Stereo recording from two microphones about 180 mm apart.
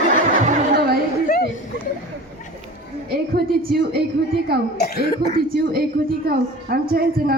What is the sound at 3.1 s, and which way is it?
Speech, 60° right (ahead or behind).